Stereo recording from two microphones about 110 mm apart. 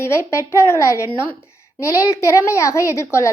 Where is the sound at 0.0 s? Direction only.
25° left (ahead or behind).